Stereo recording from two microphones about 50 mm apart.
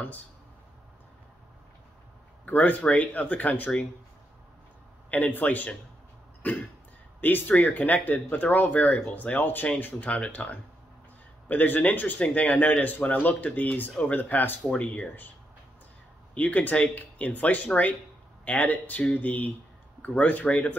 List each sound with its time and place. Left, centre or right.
2.4 s speech: left
5.1 s speech: left
14.7 s speech: left
16.3 s speech: left